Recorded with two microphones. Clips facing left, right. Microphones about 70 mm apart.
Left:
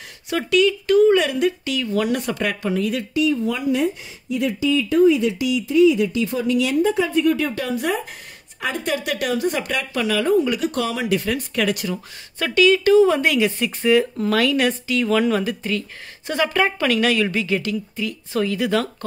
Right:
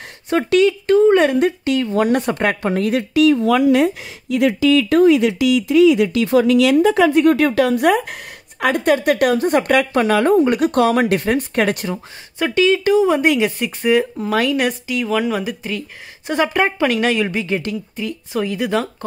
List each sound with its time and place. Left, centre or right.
0.5 s speech: right
0.8 s speech: right
3.2 s speech: right
11.9 s speech: centre
18.3 s speech: centre